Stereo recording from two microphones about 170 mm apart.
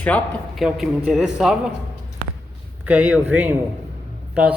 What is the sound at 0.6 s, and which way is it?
A man's voice, 5° right (ahead or behind).